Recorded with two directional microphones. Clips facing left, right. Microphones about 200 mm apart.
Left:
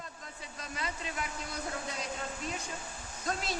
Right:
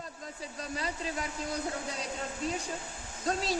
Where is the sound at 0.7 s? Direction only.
35° right (ahead or behind).